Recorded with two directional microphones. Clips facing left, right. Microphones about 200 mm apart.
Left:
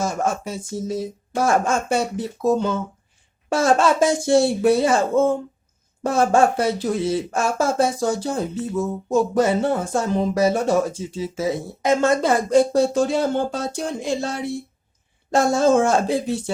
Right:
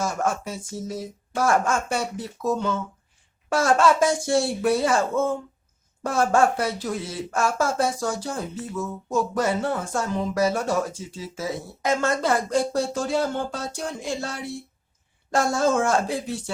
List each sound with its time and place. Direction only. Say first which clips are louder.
0.0 s speech: left 2 dB; 20° left (ahead or behind)